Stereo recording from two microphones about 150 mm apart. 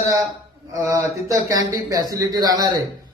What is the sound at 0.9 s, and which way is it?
A man's voice, 20° right (ahead or behind).